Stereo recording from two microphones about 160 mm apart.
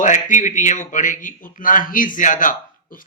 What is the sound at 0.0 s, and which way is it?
A man's voice, 55° left (ahead or behind).